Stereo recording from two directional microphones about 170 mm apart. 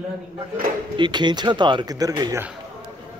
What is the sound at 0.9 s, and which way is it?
Speech, 25° right (ahead or behind).